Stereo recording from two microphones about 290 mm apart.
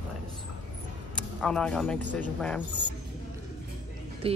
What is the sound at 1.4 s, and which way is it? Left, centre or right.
A woman's voice, centre.